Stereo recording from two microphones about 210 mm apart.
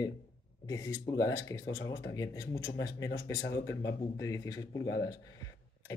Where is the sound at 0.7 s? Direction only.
15° left (ahead or behind).